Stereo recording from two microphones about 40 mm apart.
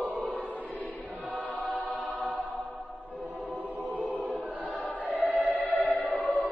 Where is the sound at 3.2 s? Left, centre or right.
Right.